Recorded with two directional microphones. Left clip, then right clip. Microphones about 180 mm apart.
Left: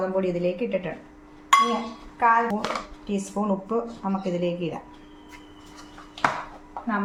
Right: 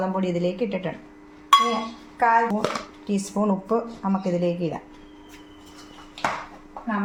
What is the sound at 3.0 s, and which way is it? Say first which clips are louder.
Speech: right 4 dB; 40° right (ahead or behind).